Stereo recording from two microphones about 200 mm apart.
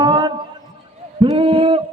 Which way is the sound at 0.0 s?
20° right (ahead or behind).